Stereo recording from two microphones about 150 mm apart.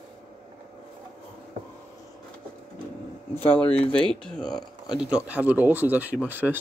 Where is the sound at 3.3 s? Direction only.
10° left (ahead or behind).